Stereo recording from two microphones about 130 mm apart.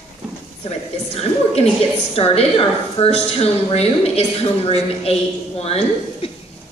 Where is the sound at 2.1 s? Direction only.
50° left (ahead or behind).